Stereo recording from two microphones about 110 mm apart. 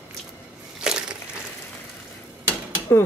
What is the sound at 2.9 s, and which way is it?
Speech, 20° left (ahead or behind).